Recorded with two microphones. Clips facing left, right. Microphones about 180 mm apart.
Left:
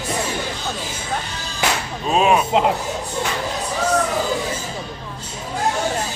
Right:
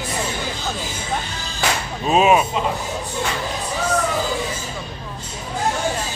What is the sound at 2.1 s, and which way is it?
Speech, 5° right (ahead or behind).